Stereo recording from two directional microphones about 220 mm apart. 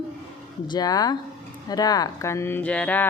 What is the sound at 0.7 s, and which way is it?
Speech, 15° left (ahead or behind).